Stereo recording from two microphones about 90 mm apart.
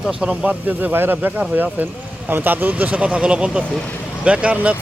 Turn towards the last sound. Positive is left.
turn(degrees=-15)  # may be behind; listen again after turning